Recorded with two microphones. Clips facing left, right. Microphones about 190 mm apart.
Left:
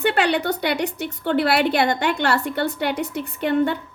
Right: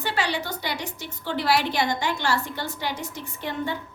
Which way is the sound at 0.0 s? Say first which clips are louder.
Left 8 dB; 60° left (ahead or behind).